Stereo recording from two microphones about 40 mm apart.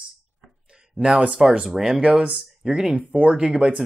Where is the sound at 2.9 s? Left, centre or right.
Right.